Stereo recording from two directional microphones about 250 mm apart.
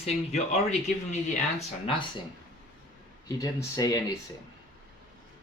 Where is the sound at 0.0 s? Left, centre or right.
Left.